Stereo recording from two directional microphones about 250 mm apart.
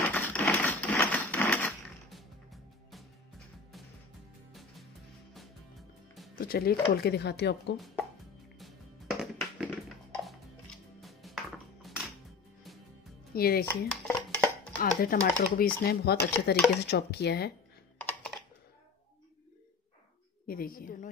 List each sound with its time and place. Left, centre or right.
0.0 s a sound: centre
4.5 s music: centre
6.3 s speech: left
7.7 s speech: centre
8.5 s music: centre
11.0 s music: centre
13.3 s speech: left
13.7 s a sound: centre
14.8 s speech: left
17.9 s computer keyboard: centre
20.4 s speech: left